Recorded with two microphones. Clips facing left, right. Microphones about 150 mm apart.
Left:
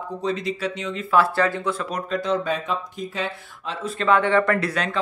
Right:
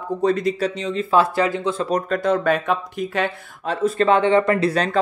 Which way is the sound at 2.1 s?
55° right (ahead or behind).